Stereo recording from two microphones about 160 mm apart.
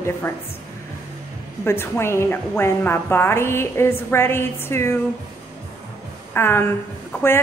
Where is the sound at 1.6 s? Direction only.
15° left (ahead or behind).